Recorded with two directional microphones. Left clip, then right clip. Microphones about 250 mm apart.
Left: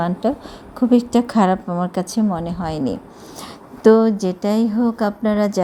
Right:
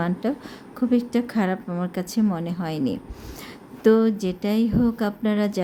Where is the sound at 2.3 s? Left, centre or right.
Centre.